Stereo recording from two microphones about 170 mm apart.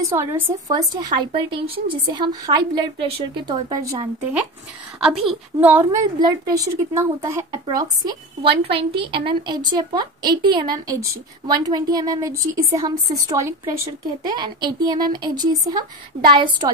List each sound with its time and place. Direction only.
0.0 s a woman's voice: 15° right (ahead or behind)
5.0 s a woman's voice: centre (ahead or behind); by 16.7 s 25° right (ahead or behind)